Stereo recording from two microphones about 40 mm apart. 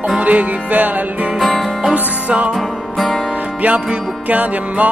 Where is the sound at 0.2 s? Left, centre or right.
Right.